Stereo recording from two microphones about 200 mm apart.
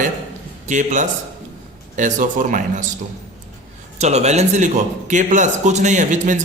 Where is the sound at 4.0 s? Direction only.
35° right (ahead or behind).